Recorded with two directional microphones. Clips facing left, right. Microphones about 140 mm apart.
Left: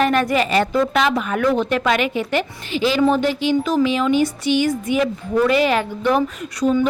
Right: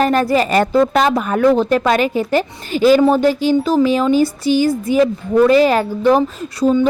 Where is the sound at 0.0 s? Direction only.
35° right (ahead or behind).